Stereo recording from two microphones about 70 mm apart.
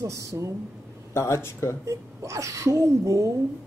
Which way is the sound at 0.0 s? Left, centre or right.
Right.